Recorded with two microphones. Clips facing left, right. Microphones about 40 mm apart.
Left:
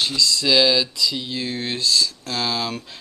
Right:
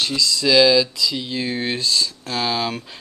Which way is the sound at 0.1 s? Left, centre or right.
Centre.